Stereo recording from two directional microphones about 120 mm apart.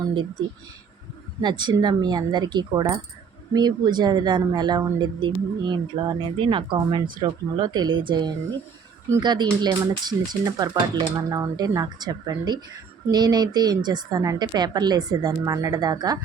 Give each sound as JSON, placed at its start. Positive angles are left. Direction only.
{"t": 0.1, "sound": "speech", "side_deg": -40}